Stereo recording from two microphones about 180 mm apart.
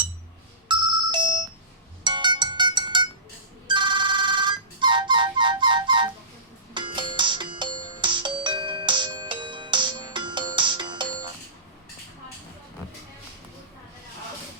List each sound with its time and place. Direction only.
0.7 s ringtone: 25° right (ahead or behind)
2.0 s music: 25° right (ahead or behind)